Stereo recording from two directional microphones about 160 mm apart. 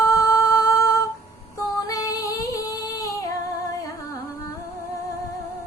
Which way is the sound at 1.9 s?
20° left (ahead or behind).